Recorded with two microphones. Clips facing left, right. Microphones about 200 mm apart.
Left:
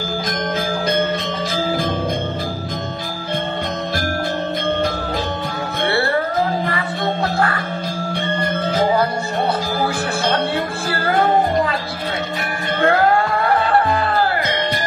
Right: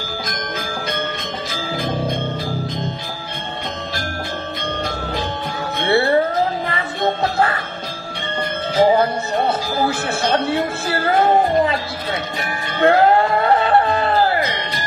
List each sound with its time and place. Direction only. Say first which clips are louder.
12.8 s music: right 3 dB; 25° right (ahead or behind)